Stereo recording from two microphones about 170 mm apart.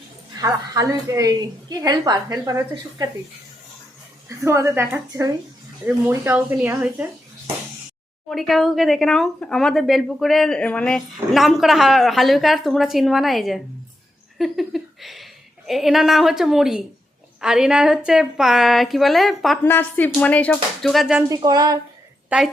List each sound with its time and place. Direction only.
0.3 s a woman's voice: 20° right (ahead or behind)
4.3 s speech: 15° right (ahead or behind)
8.3 s a woman's voice: centre (ahead or behind)
19.6 s speech: 10° left (ahead or behind)
21.2 s a woman's voice: 20° right (ahead or behind)
22.3 s speech: 5° right (ahead or behind)